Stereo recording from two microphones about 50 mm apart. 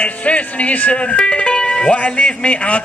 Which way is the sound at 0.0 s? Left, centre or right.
Left.